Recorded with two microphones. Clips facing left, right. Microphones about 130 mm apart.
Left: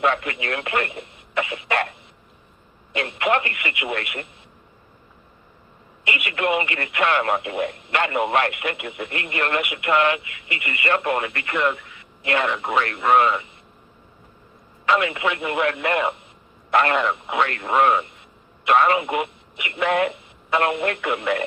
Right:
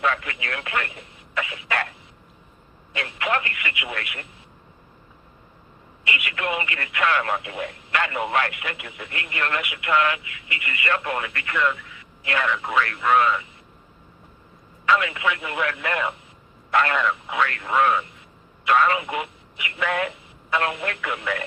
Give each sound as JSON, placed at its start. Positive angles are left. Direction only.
{"t": 0.0, "sound": "speech", "side_deg": 30}
{"t": 1.3, "sound": "cough", "side_deg": 25}
{"t": 2.9, "sound": "speech", "side_deg": 25}
{"t": 6.1, "sound": "speech", "side_deg": 30}
{"t": 14.8, "sound": "speech", "side_deg": 25}